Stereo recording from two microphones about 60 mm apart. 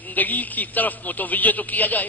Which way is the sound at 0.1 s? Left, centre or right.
Left.